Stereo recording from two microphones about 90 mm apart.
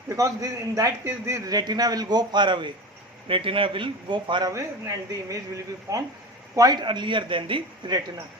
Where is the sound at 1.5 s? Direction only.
50° right (ahead or behind).